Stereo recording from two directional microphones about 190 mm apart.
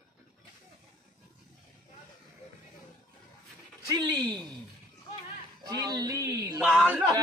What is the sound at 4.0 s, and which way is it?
Speech, 20° right (ahead or behind).